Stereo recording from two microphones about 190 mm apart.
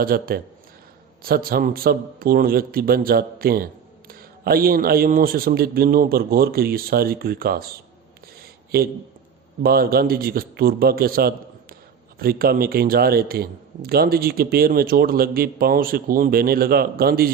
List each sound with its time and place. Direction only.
0.0 s a man's voice: 50° right (ahead or behind)
8.7 s a man's voice: 50° right (ahead or behind)